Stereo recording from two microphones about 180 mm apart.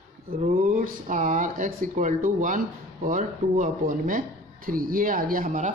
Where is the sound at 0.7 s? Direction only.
50° right (ahead or behind).